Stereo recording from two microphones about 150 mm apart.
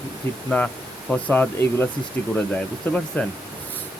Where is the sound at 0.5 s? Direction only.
5° left (ahead or behind).